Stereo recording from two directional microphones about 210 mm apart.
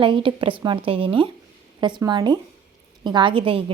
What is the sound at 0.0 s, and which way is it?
A woman's voice, 25° right (ahead or behind).